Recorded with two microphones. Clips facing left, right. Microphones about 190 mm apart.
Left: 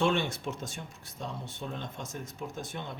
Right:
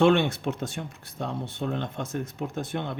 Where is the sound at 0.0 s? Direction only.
65° right (ahead or behind).